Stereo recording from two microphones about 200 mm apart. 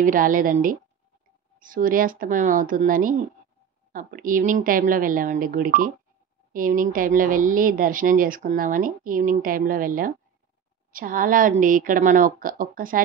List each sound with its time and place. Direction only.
0.0 s speech: 45° right (ahead or behind)